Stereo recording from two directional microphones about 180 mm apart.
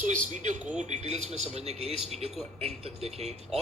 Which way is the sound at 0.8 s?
40° right (ahead or behind).